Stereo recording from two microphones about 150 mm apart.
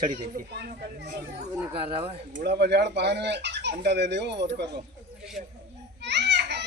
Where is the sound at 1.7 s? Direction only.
40° right (ahead or behind).